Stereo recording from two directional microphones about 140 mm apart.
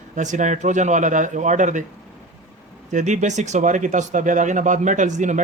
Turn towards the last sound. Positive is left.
turn(degrees=-60)  # may be behind; listen again after turning